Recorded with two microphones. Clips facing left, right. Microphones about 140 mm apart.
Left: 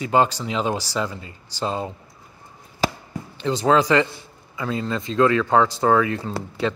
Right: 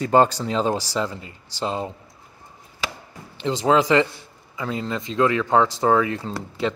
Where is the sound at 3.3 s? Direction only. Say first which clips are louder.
Even; 25° right (ahead or behind).